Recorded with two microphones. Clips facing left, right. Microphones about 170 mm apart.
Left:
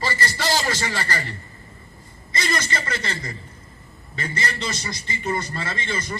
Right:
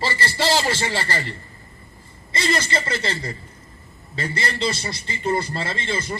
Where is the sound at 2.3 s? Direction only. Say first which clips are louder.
Right 3 dB; 30° right (ahead or behind).